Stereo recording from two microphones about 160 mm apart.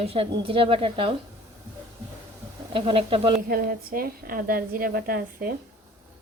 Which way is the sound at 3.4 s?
70° right (ahead or behind).